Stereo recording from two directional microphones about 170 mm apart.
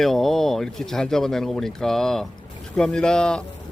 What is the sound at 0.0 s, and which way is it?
Speech, centre (ahead or behind).